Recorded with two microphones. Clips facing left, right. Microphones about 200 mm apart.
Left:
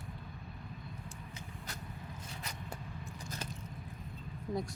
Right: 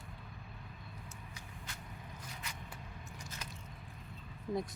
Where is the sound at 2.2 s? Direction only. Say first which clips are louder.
Left 3 dB; 35° left (ahead or behind).